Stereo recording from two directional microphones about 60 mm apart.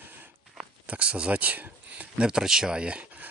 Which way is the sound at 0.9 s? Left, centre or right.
Centre.